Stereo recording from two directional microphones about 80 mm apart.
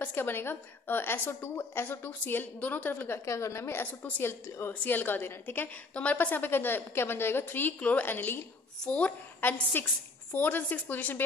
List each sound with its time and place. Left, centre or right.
0.0 s a woman's voice: left
3.3 s a woman's voice: left
8.8 s a woman's voice: centre